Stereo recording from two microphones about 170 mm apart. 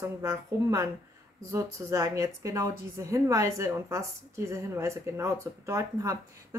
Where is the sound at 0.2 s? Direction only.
20° right (ahead or behind).